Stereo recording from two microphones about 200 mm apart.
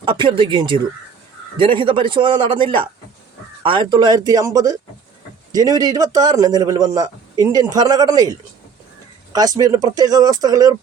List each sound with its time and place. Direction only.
0.0 s a man's voice: 25° right (ahead or behind)